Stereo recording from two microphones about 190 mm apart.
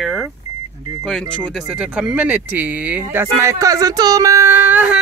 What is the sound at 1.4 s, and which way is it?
Speech, centre (ahead or behind).